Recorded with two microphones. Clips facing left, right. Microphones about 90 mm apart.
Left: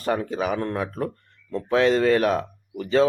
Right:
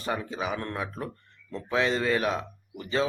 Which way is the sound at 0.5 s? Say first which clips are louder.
Left 7 dB; 30° left (ahead or behind).